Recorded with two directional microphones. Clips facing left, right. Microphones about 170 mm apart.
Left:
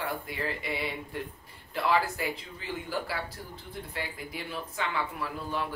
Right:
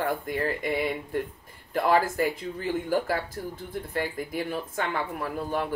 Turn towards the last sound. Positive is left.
turn(degrees=-50)  # may be behind; listen again after turning